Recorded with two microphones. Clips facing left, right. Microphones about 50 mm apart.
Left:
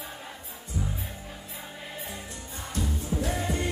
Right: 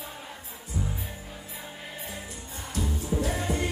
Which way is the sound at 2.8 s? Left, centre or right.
Centre.